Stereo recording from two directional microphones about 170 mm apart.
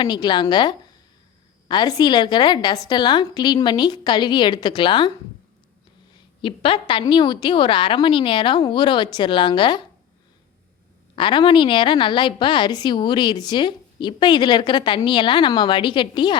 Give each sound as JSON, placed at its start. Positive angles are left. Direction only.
{"t": 0.0, "sound": "a woman's voice", "side_deg": 25}
{"t": 6.1, "sound": "a woman's voice", "side_deg": 30}
{"t": 11.1, "sound": "a woman's voice", "side_deg": 30}